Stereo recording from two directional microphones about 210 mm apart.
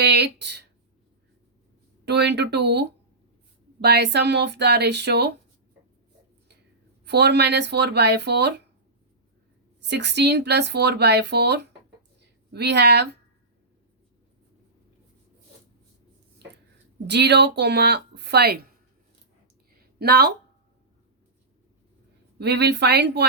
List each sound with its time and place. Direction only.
0.0 s a sound: 50° right (ahead or behind)
2.0 s speech: 55° right (ahead or behind)
7.0 s speech: 55° right (ahead or behind)
9.8 s speech: 55° right (ahead or behind)
17.1 s speech: 55° right (ahead or behind)
20.0 s speech: 50° right (ahead or behind)
22.4 s speech: 55° right (ahead or behind)